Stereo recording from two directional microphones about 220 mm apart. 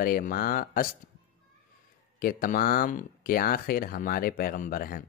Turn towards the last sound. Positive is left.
turn(degrees=40)  # may be behind; listen again after turning